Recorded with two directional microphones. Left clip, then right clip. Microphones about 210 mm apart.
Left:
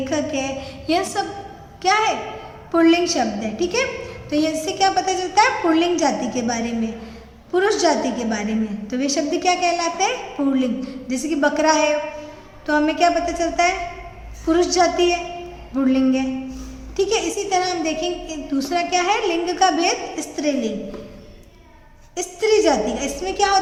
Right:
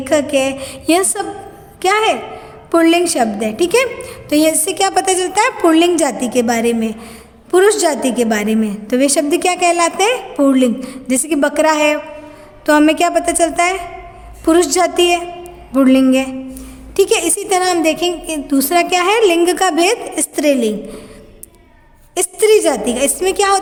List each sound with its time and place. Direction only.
0.0 s a woman's voice: 50° right (ahead or behind)
22.1 s a woman's voice: 55° right (ahead or behind)